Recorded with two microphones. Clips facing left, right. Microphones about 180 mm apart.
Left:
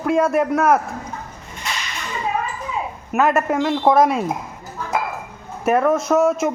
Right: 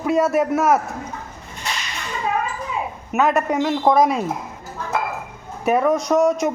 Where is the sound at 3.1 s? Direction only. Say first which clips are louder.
Left 1 dB; centre (ahead or behind).